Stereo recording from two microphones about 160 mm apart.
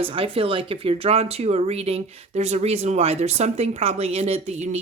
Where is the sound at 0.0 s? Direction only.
35° right (ahead or behind).